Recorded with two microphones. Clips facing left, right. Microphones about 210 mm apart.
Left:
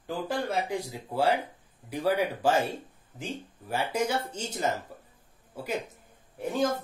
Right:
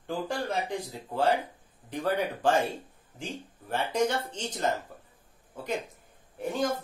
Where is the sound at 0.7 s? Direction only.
10° left (ahead or behind).